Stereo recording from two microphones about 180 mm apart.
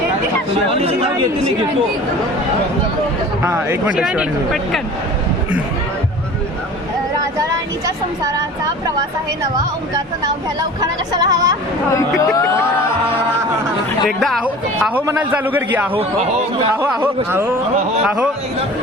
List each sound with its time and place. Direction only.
0.7 s speech: 35° right (ahead or behind)
3.4 s speech: 15° right (ahead or behind)
10.6 s speech: 20° right (ahead or behind)
14.2 s a woman's voice: centre (ahead or behind)
17.0 s speech: 10° right (ahead or behind)